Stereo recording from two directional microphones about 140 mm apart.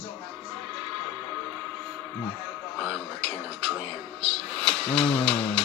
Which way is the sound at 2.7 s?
5° left (ahead or behind).